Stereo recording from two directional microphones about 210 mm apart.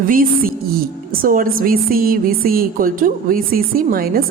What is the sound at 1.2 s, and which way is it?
A woman's voice, 40° right (ahead or behind).